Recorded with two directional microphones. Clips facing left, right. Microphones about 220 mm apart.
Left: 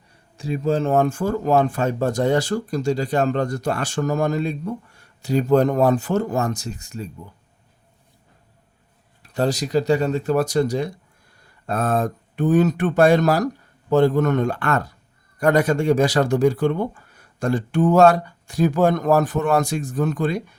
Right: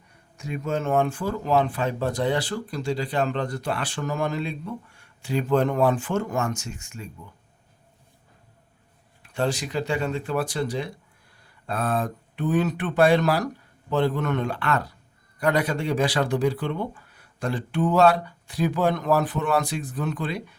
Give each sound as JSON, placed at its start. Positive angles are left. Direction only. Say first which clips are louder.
{"t": 0.3, "sound": "speech", "louder": "left 6 dB", "side_deg": 30}
{"t": 9.2, "sound": "speech", "louder": "left 4 dB", "side_deg": 40}